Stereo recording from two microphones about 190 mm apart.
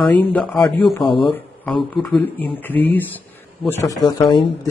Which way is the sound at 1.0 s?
25° left (ahead or behind).